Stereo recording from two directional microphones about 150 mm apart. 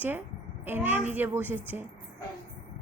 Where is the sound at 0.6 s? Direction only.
15° right (ahead or behind).